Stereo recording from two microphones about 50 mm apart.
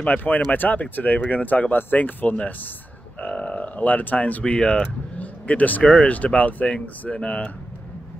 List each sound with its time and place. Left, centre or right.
0.2 s speech: left; by 4.9 s centre
5.2 s vehicle: left
6.0 s speech: left